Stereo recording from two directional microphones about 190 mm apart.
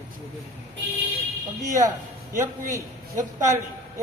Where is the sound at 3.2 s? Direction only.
15° right (ahead or behind).